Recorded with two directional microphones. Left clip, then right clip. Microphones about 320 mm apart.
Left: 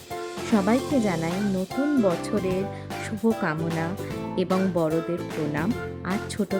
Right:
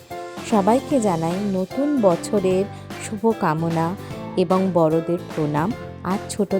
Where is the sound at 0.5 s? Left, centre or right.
Centre.